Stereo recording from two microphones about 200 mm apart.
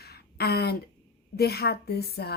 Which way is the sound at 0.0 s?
50° left (ahead or behind).